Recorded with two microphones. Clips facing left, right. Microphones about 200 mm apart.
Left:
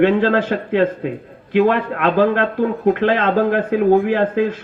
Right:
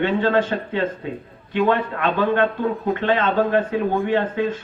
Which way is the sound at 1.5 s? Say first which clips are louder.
Left 4 dB; 90° left.